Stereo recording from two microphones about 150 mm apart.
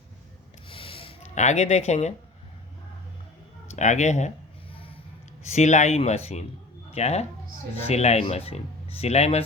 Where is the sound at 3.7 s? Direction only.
50° left (ahead or behind).